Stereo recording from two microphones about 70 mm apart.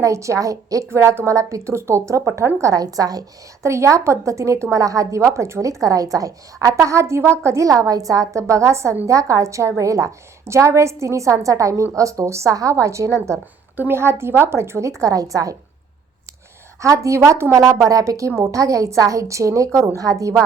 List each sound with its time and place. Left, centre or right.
0.0 s a woman's voice: right
0.9 s a woman's voice: right
3.6 s a woman's voice: right
5.2 s a woman's voice: right
13.7 s a woman's voice: right
16.8 s a woman's voice: right